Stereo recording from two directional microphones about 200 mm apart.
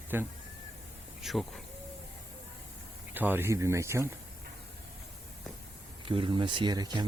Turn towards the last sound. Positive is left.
turn(degrees=-20)  # may be behind; listen again after turning